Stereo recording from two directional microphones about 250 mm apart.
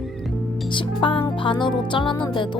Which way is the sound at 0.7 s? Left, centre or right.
Centre.